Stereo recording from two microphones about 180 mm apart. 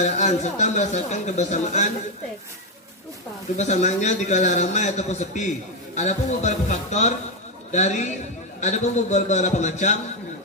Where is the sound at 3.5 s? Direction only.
40° left (ahead or behind).